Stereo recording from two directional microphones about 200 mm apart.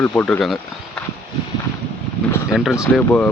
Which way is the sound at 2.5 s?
Centre (ahead or behind).